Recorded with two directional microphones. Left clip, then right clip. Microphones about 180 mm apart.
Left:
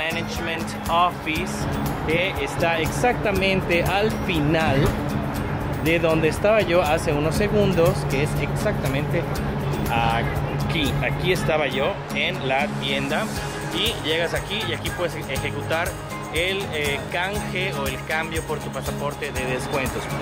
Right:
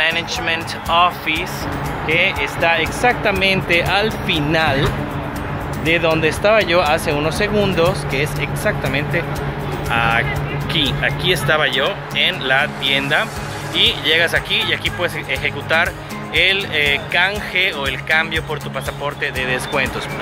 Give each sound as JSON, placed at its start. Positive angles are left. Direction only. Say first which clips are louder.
{"t": 0.0, "sound": "speech", "louder": "right 8 dB", "side_deg": 5}
{"t": 5.9, "sound": "speech", "louder": "right 4 dB", "side_deg": 5}
{"t": 19.4, "sound": "speech", "louder": "right 6 dB", "side_deg": 0}